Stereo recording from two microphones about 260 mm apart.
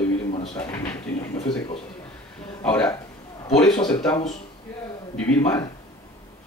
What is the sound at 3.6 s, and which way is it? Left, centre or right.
Speech, centre.